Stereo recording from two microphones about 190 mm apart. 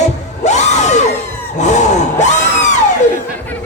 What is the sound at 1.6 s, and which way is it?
Grunt, 40° left (ahead or behind).